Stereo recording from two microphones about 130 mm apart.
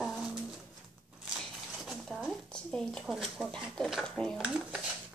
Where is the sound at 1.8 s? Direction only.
Centre (ahead or behind).